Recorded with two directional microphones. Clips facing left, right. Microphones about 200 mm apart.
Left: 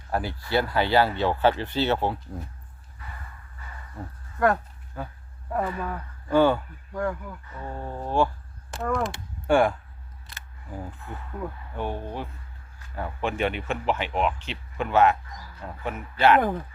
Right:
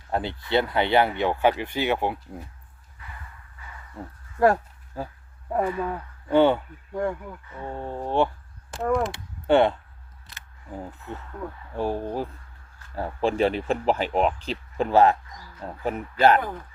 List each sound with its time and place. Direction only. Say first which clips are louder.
0.1 s speech: right 2 dB; 20° right (ahead or behind)
4.4 s a sound: right 3 dB; 30° right (ahead or behind)
5.5 s speech: right 3 dB; 20° right (ahead or behind)
11.3 s speech: left 2 dB; 5° left (ahead or behind)
11.8 s speech: right 5 dB; 35° right (ahead or behind)